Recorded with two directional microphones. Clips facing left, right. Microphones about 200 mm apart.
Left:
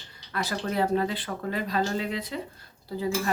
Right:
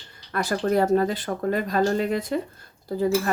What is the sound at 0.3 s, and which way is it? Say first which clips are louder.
Dishes: right 6 dB; 50° right (ahead or behind).